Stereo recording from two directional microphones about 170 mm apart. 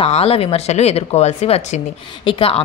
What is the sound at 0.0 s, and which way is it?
A woman's voice, 35° left (ahead or behind).